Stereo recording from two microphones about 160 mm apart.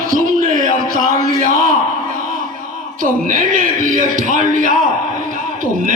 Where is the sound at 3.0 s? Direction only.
55° right (ahead or behind).